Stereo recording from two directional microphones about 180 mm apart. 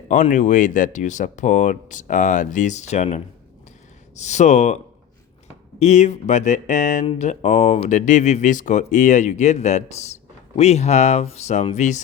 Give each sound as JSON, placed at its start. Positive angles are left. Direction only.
{"t": 0.1, "sound": "speech", "side_deg": 45}
{"t": 5.8, "sound": "speech", "side_deg": 40}